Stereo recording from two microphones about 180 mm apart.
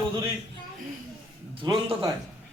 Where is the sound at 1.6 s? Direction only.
25° right (ahead or behind).